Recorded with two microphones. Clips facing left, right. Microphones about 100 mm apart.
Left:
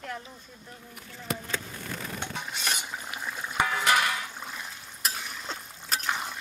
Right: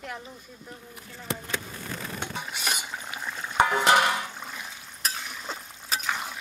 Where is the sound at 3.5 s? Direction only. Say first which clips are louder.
Right 5 dB; 30° right (ahead or behind).